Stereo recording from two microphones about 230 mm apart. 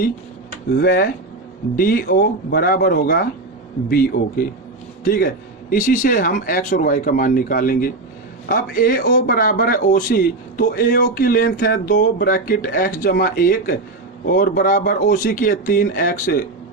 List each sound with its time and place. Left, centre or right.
0.7 s a man's voice: left